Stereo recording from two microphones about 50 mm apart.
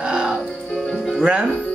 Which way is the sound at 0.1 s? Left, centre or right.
Centre.